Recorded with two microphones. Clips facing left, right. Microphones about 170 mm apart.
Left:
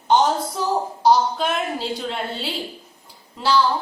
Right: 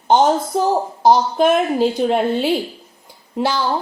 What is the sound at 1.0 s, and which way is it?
A woman's voice, 50° right (ahead or behind).